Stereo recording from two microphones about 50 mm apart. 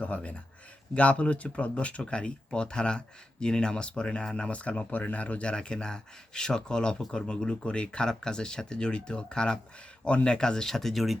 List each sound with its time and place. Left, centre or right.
0.0 s speech: left; by 11.0 s centre